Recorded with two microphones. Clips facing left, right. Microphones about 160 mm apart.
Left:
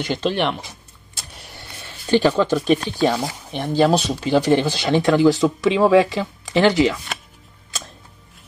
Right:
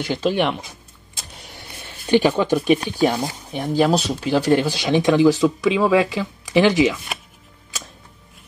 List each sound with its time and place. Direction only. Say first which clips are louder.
0.0 s speech: right 1 dB; 5° right (ahead or behind)
1.1 s a sound: even; 15° right (ahead or behind)
3.3 s speech: even; 10° right (ahead or behind)
5.4 s speech: left 1 dB; centre (ahead or behind)